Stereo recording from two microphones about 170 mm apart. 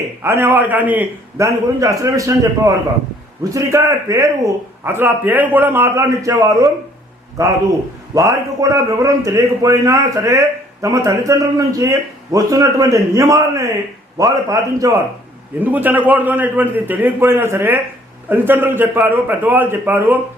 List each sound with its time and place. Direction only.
0.2 s a man's voice: 15° right (ahead or behind)